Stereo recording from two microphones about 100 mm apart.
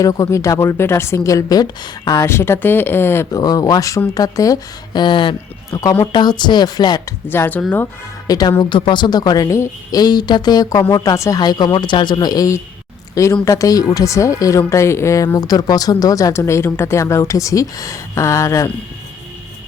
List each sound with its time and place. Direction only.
0.0 s speech: 35° left (ahead or behind)
2.2 s speech: 25° left (ahead or behind)
3.3 s speech: 40° left (ahead or behind)
4.9 s speech: 55° left (ahead or behind)
7.3 s speech: 20° left (ahead or behind)
8.3 s speech: 40° left (ahead or behind)